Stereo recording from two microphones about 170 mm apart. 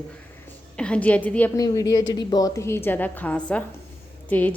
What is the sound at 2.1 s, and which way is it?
A woman's voice, 25° left (ahead or behind).